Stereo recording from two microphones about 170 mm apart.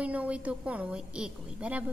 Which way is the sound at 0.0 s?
10° right (ahead or behind).